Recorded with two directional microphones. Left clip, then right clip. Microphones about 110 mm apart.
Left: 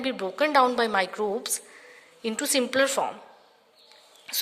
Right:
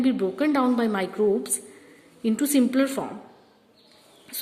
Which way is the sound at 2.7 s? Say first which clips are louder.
Left 2 dB; 35° left (ahead or behind).